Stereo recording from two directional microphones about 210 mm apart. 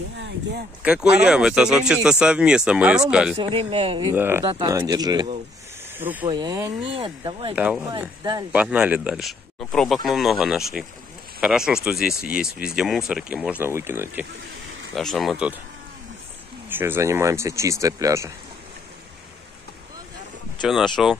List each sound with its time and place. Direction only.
1.2 s speech: 5° right (ahead or behind)
3.3 s speech: 30° right (ahead or behind)
4.1 s speech: 10° right (ahead or behind)
5.9 s speech: 10° right (ahead or behind)
6.2 s speech: 20° right (ahead or behind)
7.5 s speech: 5° right (ahead or behind)
8.0 s speech: 15° right (ahead or behind)
8.5 s speech: 5° right (ahead or behind)
15.0 s speech: centre (ahead or behind)
16.6 s speech: 10° right (ahead or behind)
20.6 s speech: centre (ahead or behind)